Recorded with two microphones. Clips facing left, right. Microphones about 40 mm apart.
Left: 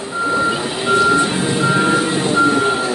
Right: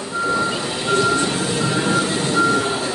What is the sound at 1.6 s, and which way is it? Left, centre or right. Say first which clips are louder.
Music: left 5 dB; left.